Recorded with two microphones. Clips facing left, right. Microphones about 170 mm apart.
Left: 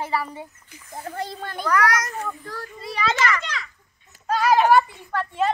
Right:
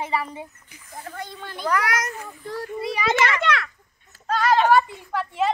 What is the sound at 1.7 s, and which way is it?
A child's voice, 25° right (ahead or behind).